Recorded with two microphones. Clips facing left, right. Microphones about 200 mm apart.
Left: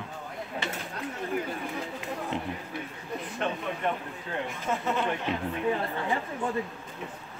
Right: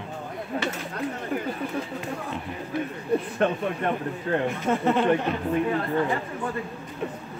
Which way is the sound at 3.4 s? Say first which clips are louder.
Right 6 dB; 50° right (ahead or behind).